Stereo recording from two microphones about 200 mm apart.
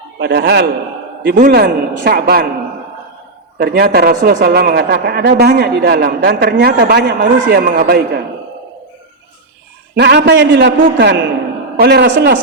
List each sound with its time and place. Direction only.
0.2 s a man's voice: 55° right (ahead or behind)
3.6 s a man's voice: 50° right (ahead or behind)
9.9 s a man's voice: 55° right (ahead or behind)